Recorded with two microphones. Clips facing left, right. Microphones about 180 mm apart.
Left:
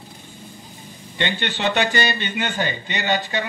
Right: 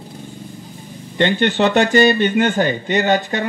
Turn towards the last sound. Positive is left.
turn(degrees=-45)  # may be behind; listen again after turning